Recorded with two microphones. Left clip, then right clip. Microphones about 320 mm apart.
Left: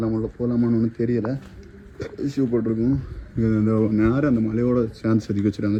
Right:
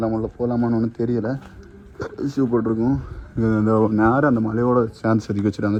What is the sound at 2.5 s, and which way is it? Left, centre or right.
Speech, right.